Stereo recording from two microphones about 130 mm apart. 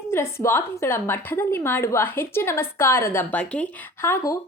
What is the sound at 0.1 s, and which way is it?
A woman's voice, 20° left (ahead or behind).